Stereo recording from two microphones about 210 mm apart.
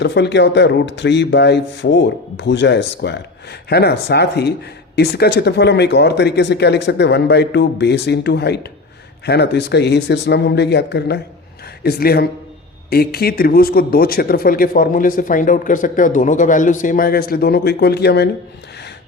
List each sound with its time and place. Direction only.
0.0 s speech: 55° left (ahead or behind)